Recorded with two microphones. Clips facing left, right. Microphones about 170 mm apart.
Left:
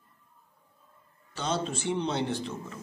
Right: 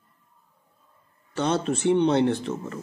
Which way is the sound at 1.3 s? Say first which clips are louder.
Right 7 dB; 60° right (ahead or behind).